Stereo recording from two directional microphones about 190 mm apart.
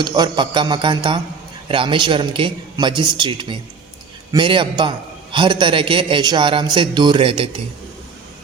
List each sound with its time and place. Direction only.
0.0 s a man's voice: 25° right (ahead or behind)